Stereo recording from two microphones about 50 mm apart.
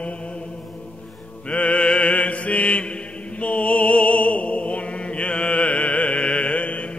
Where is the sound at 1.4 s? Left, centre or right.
Left.